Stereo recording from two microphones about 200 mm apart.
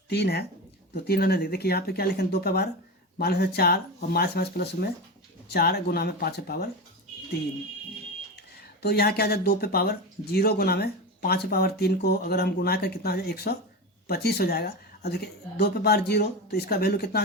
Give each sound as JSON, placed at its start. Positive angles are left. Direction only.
{"t": 0.1, "sound": "speech", "side_deg": 55}
{"t": 8.5, "sound": "speech", "side_deg": 55}